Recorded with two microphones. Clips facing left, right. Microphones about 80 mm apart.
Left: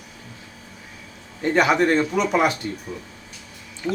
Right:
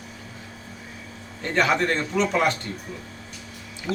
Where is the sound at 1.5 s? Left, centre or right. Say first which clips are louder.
Left 4 dB; centre.